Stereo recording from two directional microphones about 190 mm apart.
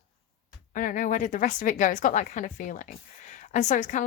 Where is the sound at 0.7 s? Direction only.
45° left (ahead or behind).